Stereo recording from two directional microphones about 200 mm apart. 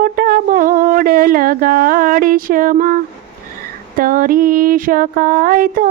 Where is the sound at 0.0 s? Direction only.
45° right (ahead or behind).